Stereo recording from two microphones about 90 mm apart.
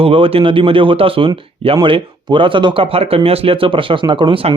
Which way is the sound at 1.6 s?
70° right (ahead or behind).